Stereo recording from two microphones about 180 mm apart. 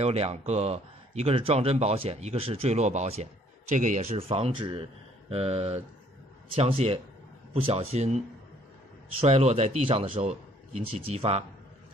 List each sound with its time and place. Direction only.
0.0 s speech: 35° right (ahead or behind)
9.2 s speech: 35° right (ahead or behind)